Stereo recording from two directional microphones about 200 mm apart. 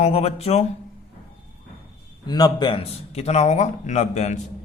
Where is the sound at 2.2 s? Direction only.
20° left (ahead or behind).